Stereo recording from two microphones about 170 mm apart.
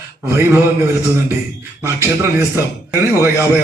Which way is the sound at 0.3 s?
15° right (ahead or behind).